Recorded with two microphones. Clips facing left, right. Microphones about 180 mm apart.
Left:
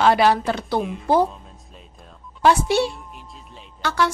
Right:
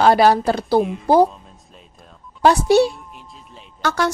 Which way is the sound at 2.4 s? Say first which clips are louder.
Right 4 dB; 40° right (ahead or behind).